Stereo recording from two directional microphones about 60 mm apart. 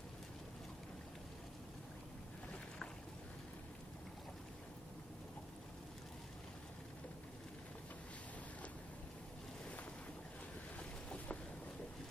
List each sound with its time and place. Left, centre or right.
2.5 s boat: centre
10.8 s boat: left